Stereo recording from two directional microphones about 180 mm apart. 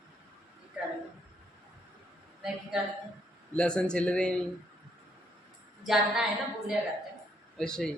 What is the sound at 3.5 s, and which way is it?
Speech, 5° left (ahead or behind).